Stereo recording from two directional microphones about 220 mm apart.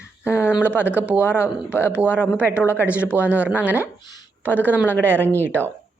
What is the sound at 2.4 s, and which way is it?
Speech, 10° left (ahead or behind).